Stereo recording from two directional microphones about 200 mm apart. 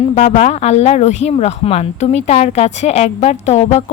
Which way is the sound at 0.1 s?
35° left (ahead or behind).